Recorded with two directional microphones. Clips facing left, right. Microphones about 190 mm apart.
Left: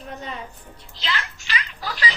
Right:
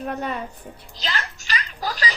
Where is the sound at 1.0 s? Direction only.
40° right (ahead or behind).